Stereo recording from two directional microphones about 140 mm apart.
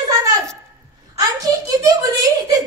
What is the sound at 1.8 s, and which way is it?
Speech, 25° right (ahead or behind).